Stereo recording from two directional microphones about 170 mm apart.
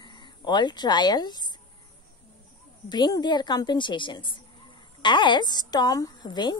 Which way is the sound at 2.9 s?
25° left (ahead or behind).